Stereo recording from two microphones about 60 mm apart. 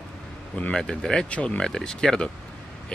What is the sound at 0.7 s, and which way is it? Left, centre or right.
Speech, centre.